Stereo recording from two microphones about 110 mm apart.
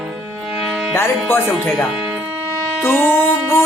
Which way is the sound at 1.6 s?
Centre (ahead or behind).